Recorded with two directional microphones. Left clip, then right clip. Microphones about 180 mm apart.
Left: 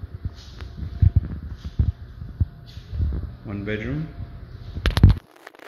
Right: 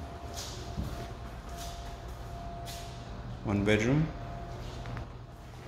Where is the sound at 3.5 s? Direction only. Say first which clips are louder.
Right 2 dB; 15° right (ahead or behind).